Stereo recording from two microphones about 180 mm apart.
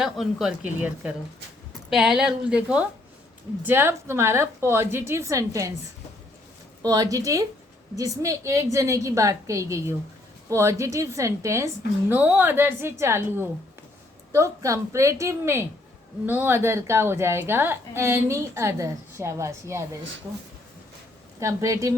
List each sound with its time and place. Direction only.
0.0 s a woman's voice: 5° right (ahead or behind); by 5.7 s 20° right (ahead or behind)
6.8 s a woman's voice: 20° right (ahead or behind)
21.3 s a woman's voice: 20° right (ahead or behind)